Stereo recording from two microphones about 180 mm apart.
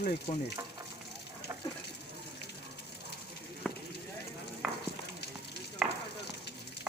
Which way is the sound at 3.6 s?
Centre (ahead or behind).